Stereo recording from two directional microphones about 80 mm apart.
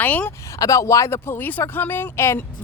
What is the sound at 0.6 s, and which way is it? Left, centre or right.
A woman's voice, left.